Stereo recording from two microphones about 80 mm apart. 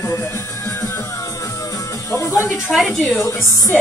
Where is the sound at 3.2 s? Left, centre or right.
Left.